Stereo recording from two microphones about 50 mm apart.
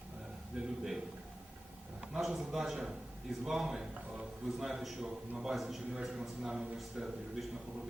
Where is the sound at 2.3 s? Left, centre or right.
Centre.